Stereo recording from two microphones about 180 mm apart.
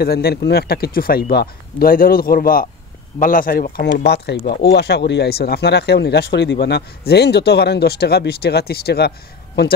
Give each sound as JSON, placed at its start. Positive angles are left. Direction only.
{"t": 0.0, "sound": "speech", "side_deg": 60}